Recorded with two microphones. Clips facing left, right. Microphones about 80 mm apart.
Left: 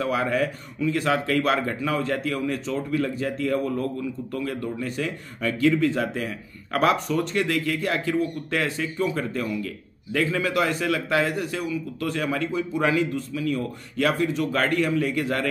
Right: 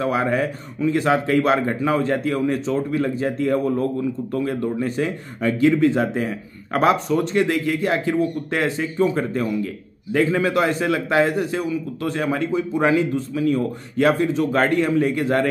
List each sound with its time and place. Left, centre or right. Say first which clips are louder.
0.0 s speech: right 3 dB; right